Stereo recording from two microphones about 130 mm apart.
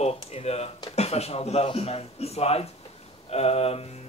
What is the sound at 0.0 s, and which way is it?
Speech, 50° left (ahead or behind).